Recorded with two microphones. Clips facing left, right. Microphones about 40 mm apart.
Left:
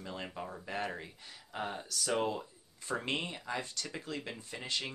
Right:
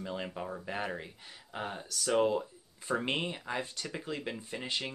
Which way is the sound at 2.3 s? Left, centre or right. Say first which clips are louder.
Right 6 dB; centre.